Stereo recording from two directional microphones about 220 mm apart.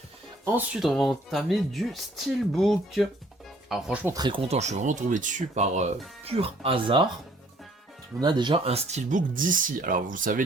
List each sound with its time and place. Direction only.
0.4 s speech: 5° right (ahead or behind); by 7.0 s 25° right (ahead or behind)
8.2 s speech: 20° right (ahead or behind); by 10.4 s 35° right (ahead or behind)